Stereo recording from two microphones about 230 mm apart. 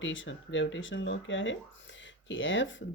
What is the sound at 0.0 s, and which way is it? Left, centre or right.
Speech, left.